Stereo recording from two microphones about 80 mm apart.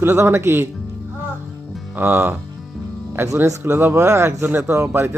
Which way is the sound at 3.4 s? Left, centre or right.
Right.